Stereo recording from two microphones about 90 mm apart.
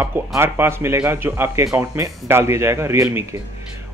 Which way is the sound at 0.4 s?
30° right (ahead or behind).